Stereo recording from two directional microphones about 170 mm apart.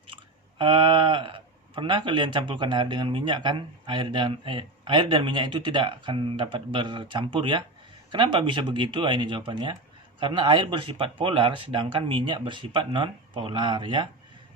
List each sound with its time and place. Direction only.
0.6 s speech: 30° right (ahead or behind)